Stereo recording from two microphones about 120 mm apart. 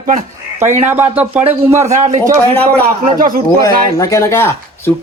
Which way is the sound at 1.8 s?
75° right (ahead or behind).